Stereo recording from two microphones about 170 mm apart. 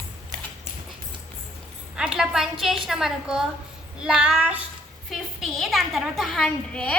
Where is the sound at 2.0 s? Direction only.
5° right (ahead or behind).